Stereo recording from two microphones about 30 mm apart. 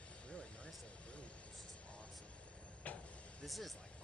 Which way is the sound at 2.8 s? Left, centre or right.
Left.